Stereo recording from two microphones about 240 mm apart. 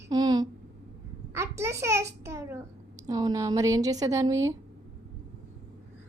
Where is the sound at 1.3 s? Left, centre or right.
Centre.